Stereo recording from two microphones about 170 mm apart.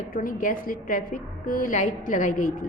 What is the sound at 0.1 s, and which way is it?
A woman's voice, 50° left (ahead or behind).